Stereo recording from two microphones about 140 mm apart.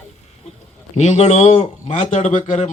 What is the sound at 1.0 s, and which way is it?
A man's voice, 50° left (ahead or behind).